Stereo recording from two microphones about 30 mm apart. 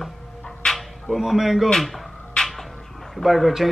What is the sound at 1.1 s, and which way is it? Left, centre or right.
Speech, centre.